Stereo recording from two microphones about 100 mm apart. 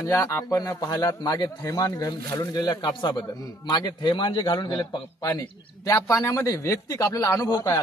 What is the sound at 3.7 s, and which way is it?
A man's voice, 40° left (ahead or behind).